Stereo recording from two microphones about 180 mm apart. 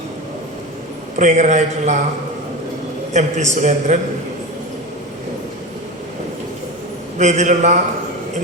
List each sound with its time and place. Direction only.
1.1 s a man's voice: 40° right (ahead or behind)
3.1 s a man's voice: 40° right (ahead or behind)
7.2 s a man's voice: 40° right (ahead or behind)